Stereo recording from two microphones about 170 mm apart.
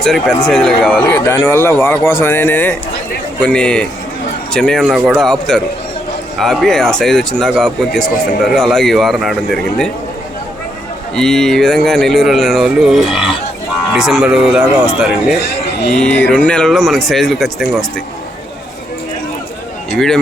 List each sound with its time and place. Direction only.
0.0 s a man's voice: 5° left (ahead or behind)
11.1 s a man's voice: 5° left (ahead or behind)
15.6 s a sound: 85° left
16.0 s a man's voice: 5° left (ahead or behind)
19.9 s speech: centre (ahead or behind)